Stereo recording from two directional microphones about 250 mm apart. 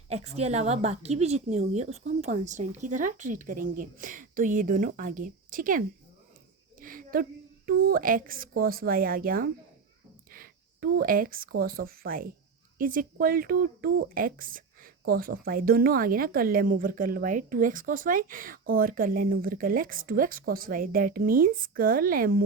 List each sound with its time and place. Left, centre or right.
0.1 s a woman's voice: right
6.7 s a sound: right
7.7 s speech: right